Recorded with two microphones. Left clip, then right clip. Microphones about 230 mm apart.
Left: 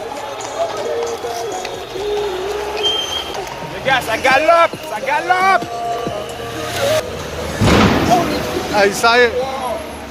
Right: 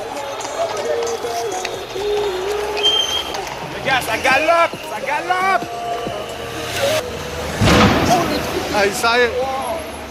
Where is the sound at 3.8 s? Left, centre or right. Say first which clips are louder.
Left 2 dB; left.